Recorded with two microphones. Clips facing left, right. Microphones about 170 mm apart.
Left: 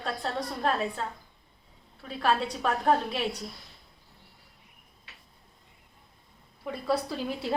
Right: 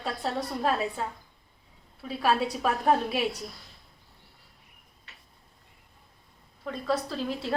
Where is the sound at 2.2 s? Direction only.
10° right (ahead or behind).